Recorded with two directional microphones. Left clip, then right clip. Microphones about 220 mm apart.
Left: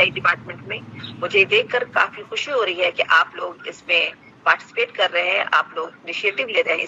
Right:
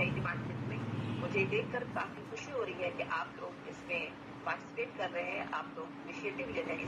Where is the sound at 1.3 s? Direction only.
45° left (ahead or behind).